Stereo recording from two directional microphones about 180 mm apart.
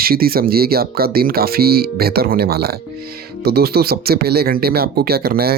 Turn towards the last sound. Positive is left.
turn(degrees=-60)  # may be behind; listen again after turning